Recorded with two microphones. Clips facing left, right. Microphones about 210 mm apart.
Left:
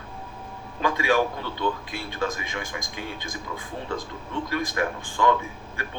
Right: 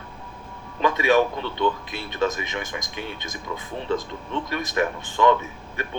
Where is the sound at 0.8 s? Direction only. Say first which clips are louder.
Right 3 dB; 20° right (ahead or behind).